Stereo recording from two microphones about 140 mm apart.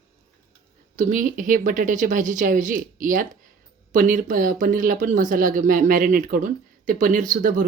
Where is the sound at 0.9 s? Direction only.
70° right (ahead or behind).